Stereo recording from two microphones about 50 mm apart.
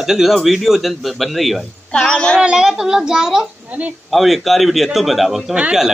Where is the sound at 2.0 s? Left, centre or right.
Centre.